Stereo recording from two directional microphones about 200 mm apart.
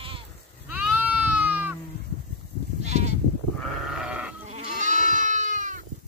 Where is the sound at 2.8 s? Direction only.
35° right (ahead or behind).